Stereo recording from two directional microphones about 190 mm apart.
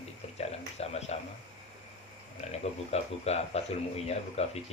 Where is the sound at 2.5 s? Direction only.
35° left (ahead or behind).